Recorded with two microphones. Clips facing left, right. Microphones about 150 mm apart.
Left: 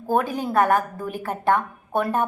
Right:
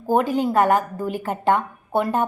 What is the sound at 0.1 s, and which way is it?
Speech, 15° right (ahead or behind).